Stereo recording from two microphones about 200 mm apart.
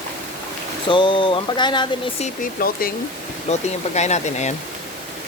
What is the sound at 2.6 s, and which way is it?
Speech, 45° left (ahead or behind).